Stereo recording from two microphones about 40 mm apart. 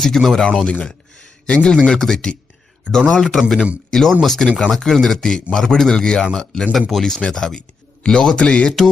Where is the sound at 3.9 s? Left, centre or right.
Centre.